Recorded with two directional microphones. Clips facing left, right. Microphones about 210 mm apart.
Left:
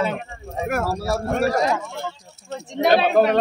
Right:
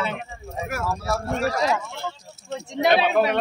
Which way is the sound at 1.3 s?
50° left (ahead or behind).